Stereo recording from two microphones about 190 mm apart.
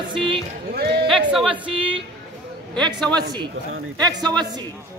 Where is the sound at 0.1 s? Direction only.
25° right (ahead or behind).